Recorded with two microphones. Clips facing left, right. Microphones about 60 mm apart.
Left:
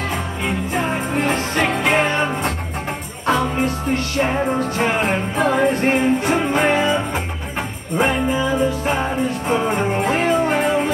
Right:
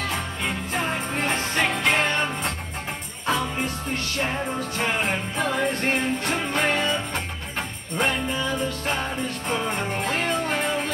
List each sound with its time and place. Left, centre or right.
0.1 s music: centre
4.2 s music: left